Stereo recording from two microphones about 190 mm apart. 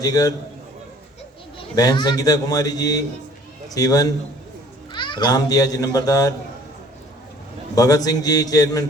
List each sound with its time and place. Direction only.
0.0 s a man's voice: 20° left (ahead or behind)
1.5 s a man's voice: 20° left (ahead or behind)
7.8 s a man's voice: 20° left (ahead or behind)